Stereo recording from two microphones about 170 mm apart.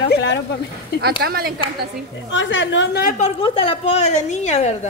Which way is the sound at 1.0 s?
65° right (ahead or behind).